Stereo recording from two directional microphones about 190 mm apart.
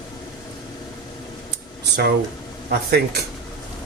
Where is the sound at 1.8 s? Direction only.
60° right (ahead or behind).